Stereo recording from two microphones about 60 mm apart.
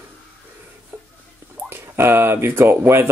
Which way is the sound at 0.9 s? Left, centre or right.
Right.